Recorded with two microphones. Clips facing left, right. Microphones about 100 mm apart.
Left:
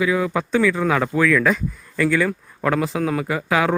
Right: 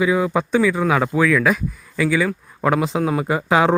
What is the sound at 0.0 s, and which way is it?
Speech, 20° right (ahead or behind).